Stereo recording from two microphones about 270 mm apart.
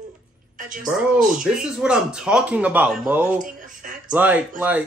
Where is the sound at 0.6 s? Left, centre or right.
Right.